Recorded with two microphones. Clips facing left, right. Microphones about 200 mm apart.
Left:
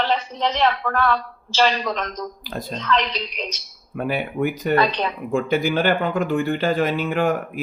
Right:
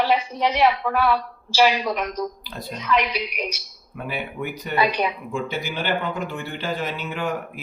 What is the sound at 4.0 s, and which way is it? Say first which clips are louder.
Speech: left 7 dB; 55° left (ahead or behind).